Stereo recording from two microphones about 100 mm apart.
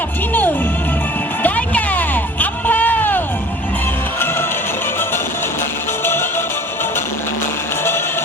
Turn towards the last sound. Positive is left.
turn(degrees=25)  # may be behind; listen again after turning